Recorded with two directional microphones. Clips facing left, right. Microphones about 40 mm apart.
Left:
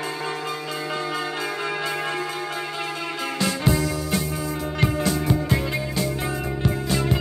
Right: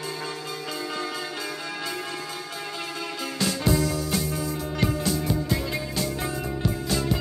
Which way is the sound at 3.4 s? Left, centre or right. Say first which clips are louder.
Left 1 dB; left.